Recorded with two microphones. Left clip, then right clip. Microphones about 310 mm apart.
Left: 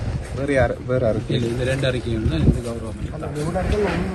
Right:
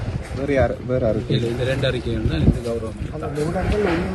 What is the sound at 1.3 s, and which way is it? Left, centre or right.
A man's voice, centre.